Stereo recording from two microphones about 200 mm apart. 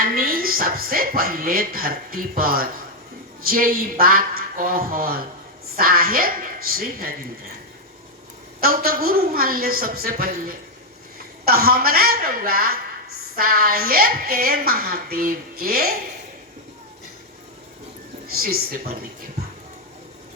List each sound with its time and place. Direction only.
0.0 s speech: 45° right (ahead or behind)
8.6 s speech: 45° right (ahead or behind)
11.4 s speech: 50° right (ahead or behind)
18.3 s speech: 50° right (ahead or behind)